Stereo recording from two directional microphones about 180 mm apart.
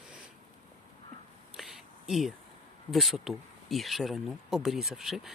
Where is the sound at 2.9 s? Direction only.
Centre (ahead or behind).